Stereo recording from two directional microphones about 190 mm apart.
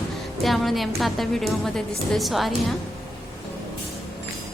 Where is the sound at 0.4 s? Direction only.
Centre (ahead or behind).